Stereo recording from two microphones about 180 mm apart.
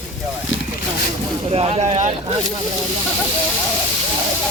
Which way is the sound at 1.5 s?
35° right (ahead or behind).